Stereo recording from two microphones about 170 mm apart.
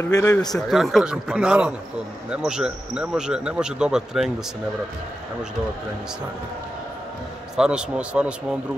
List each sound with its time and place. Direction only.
0.0 s speech: 20° left (ahead or behind)
0.5 s speech: centre (ahead or behind)
7.5 s speech: 5° right (ahead or behind)